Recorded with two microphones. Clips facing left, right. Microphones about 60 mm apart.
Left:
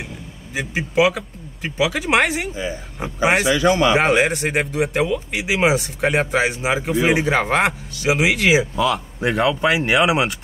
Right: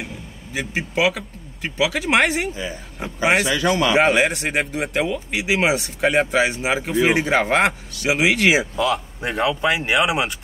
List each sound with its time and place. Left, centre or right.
0.9 s speech: centre
2.5 s speech: left
3.9 s speech: centre